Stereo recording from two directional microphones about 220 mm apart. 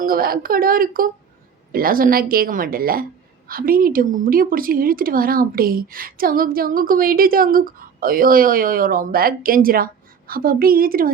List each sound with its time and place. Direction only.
0.0 s speech: 40° right (ahead or behind)